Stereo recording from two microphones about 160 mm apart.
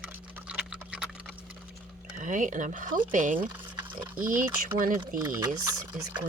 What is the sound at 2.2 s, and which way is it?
Speech, 50° right (ahead or behind).